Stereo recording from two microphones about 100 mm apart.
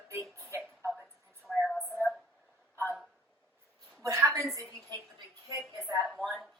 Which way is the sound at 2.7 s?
20° right (ahead or behind).